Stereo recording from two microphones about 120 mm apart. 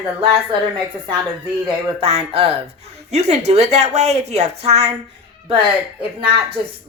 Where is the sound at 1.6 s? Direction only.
50° right (ahead or behind).